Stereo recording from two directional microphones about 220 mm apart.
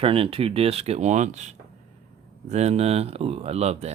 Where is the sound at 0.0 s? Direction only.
25° right (ahead or behind).